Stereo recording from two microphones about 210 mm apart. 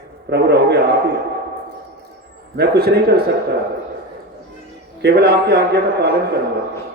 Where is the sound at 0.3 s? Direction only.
50° right (ahead or behind).